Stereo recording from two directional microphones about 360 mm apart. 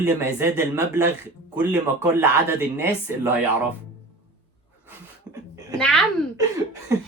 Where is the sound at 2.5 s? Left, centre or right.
Centre.